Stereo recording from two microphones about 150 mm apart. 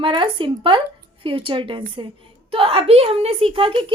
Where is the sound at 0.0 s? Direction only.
35° right (ahead or behind).